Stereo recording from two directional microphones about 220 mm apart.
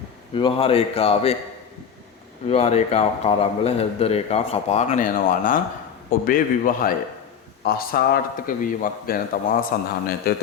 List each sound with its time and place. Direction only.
0.3 s a man's voice: 25° left (ahead or behind)
2.5 s a man's voice: 30° left (ahead or behind); by 10.4 s 45° left (ahead or behind)